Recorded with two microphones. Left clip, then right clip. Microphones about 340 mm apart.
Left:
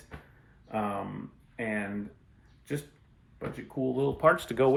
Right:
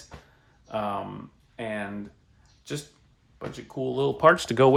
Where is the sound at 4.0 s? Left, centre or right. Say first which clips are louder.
Right 5 dB; right.